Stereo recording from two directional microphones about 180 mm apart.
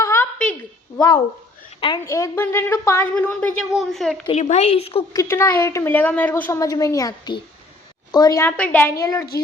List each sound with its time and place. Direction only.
0.0 s a sound: 15° left (ahead or behind)
1.8 s a woman's voice: 20° left (ahead or behind); by 4.2 s centre (ahead or behind)
4.3 s speech: 40° left (ahead or behind)
5.1 s a woman's voice: 15° left (ahead or behind)